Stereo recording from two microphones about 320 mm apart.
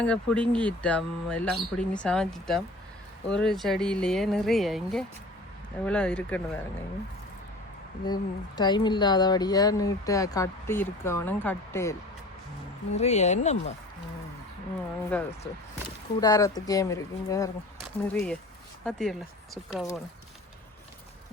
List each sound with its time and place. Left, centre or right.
0.0 s speech: centre
8.0 s speech: centre
13.0 s speech: left
15.1 s speech: centre